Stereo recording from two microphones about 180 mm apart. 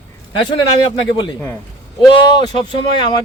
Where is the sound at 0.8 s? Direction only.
25° left (ahead or behind).